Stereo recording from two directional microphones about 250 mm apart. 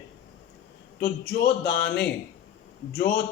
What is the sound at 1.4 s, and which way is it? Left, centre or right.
Speech, left.